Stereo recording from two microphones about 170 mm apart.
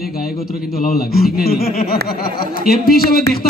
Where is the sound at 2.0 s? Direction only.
60° left (ahead or behind).